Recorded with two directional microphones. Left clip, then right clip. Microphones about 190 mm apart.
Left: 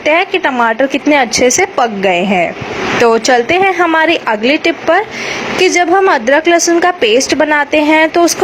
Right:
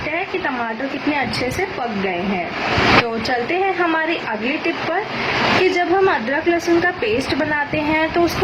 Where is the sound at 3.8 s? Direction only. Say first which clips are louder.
Left 9 dB; 35° left (ahead or behind).